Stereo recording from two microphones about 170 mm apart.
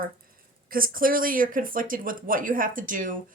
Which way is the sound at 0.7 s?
55° right (ahead or behind).